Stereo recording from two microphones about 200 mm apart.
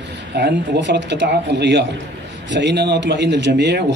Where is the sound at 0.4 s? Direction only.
60° right (ahead or behind).